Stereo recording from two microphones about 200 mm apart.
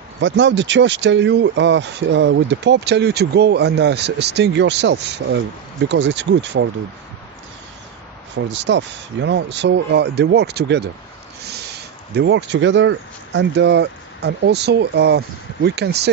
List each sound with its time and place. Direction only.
0.2 s speech: 65° right (ahead or behind)
8.5 s speech: 60° right (ahead or behind)
12.2 s speech: 65° right (ahead or behind)